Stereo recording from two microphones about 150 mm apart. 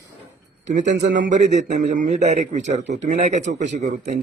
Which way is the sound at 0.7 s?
60° right (ahead or behind).